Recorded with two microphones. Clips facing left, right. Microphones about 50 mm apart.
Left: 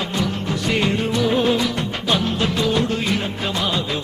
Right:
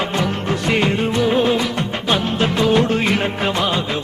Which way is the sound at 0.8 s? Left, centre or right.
Right.